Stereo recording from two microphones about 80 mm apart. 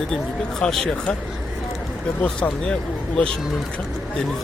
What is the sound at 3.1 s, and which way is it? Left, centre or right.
Speech, centre.